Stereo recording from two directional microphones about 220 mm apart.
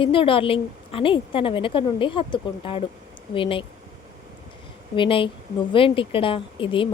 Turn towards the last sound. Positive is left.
turn(degrees=20)  # may be behind; listen again after turning